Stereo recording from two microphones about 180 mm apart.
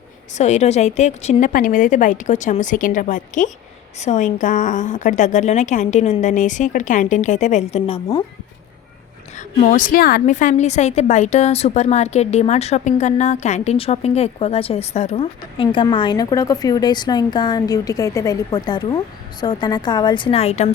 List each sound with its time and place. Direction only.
0.3 s a woman's voice: 40° left (ahead or behind)
9.6 s a woman's voice: 45° left (ahead or behind)